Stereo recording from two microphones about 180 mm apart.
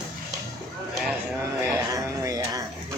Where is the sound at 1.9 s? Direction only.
20° right (ahead or behind).